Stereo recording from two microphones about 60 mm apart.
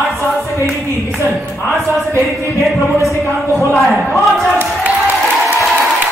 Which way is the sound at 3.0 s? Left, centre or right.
Left.